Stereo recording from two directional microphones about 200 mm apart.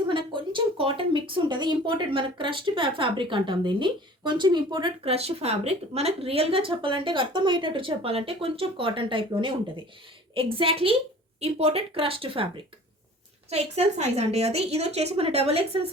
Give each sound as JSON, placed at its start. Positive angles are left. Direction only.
{"t": 0.1, "sound": "speech", "side_deg": -25}
{"t": 13.5, "sound": "a woman's voice", "side_deg": -30}